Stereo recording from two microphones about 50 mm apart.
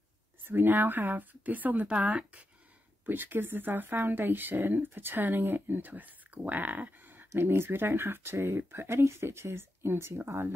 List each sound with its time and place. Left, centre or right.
0.5 s speech: right
3.1 s speech: right
7.3 s speech: right